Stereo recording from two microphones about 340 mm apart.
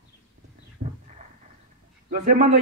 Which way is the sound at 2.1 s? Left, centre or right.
Right.